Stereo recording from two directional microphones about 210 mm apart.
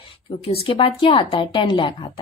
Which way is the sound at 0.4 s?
30° left (ahead or behind).